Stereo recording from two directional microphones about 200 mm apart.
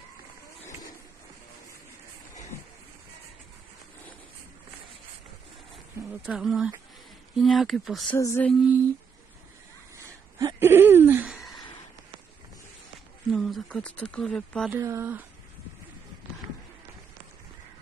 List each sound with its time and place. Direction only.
6.2 s speech: centre (ahead or behind)
8.2 s mantra: 10° left (ahead or behind)
9.9 s a sound: 15° right (ahead or behind)
13.3 s speech: centre (ahead or behind)
14.7 s speech: 15° right (ahead or behind)